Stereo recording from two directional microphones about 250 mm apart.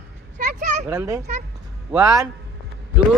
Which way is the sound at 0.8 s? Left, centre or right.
Centre.